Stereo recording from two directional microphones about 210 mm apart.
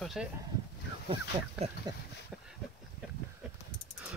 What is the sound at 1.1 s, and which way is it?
Speech, 25° right (ahead or behind).